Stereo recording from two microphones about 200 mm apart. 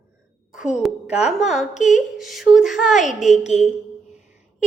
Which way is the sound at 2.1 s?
Centre (ahead or behind).